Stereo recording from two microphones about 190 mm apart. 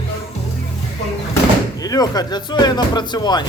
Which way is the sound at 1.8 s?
20° left (ahead or behind).